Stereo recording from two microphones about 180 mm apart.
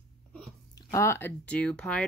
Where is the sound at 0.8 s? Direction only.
15° left (ahead or behind).